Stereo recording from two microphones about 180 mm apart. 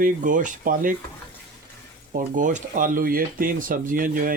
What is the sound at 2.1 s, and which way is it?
Speech, 50° right (ahead or behind).